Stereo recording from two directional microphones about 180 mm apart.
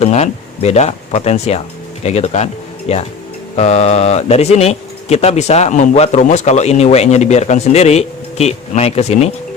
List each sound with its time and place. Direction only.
0.0 s speech: 35° left (ahead or behind)